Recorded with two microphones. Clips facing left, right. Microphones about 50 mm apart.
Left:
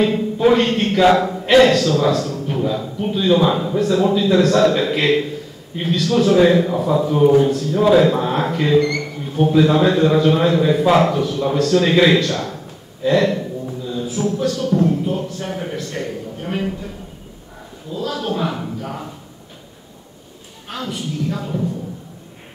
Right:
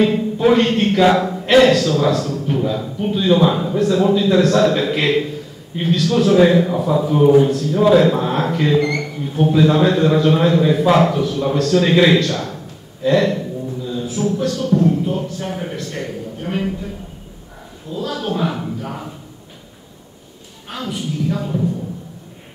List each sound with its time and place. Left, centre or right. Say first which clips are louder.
0.0 s a man's voice: right 1 dB; centre
17.9 s a man's voice: even; centre
20.6 s a man's voice: right 1 dB; centre